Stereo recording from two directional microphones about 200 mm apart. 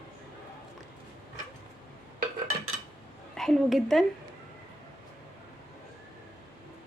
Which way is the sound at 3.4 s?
Centre (ahead or behind).